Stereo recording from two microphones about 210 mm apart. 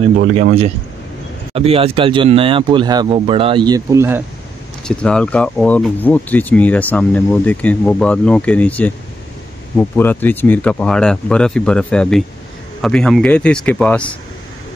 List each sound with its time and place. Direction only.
0.4 s speech: 35° right (ahead or behind); by 4.2 s 15° right (ahead or behind)
4.8 s speech: 5° left (ahead or behind)